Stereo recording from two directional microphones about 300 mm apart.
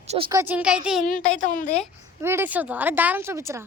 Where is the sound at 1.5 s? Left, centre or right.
Left.